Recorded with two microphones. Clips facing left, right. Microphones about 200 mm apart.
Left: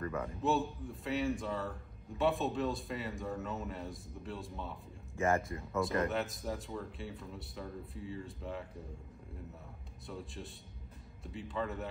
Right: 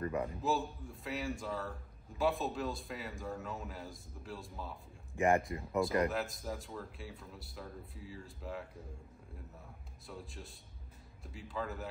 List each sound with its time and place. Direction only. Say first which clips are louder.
0.0 s a man's voice: right 2 dB; 15° right (ahead or behind)
0.4 s a man's voice: left 2 dB; centre (ahead or behind)
5.1 s speech: right 2 dB; 15° right (ahead or behind)
6.0 s a man's voice: left 1 dB; centre (ahead or behind)
10.0 s a man's voice: left 3 dB; centre (ahead or behind)